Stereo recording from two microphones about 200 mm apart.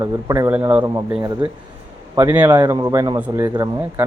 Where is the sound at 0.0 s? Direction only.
15° right (ahead or behind).